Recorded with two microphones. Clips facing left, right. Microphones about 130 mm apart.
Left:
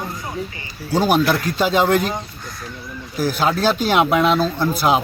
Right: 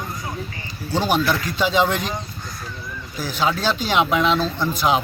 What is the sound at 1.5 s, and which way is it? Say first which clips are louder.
Speech: left 3 dB; 45° left (ahead or behind).